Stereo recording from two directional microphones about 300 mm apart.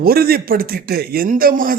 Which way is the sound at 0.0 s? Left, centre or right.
Right.